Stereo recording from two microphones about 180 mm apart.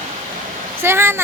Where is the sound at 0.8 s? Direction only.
15° right (ahead or behind).